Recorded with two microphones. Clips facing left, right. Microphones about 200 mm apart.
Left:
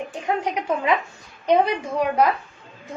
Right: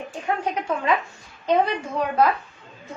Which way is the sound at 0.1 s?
15° left (ahead or behind).